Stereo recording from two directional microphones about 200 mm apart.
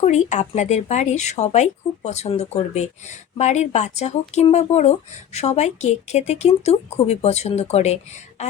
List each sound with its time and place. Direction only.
0.0 s speech: 35° left (ahead or behind)